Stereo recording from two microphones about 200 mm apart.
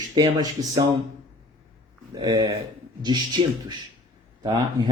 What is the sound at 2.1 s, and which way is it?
Speech, 20° right (ahead or behind).